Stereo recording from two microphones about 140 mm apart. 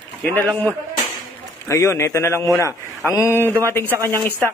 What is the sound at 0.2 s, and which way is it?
A man's voice, 10° left (ahead or behind).